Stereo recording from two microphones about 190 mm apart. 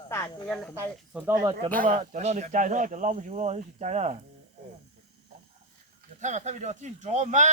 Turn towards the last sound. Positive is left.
turn(degrees=-40)  # may be behind; listen again after turning